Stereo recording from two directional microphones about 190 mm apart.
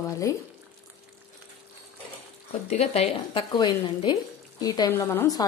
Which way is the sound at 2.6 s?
35° left (ahead or behind).